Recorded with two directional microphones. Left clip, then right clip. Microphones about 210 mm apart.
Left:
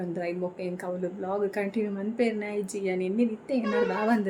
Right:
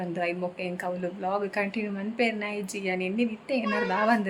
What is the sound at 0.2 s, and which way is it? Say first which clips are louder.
A woman's voice: right 3 dB; 5° left (ahead or behind).